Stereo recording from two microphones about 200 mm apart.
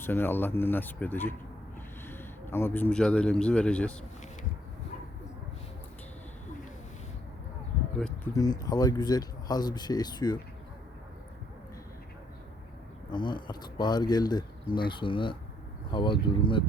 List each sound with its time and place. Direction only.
0.0 s a man's voice: 10° left (ahead or behind)
8.3 s speech: 15° left (ahead or behind)
13.1 s speech: 20° left (ahead or behind)